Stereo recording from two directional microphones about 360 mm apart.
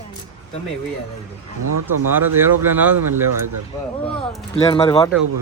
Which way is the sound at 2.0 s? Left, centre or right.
Centre.